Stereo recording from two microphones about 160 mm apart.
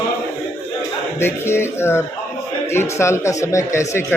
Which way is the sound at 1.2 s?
15° left (ahead or behind).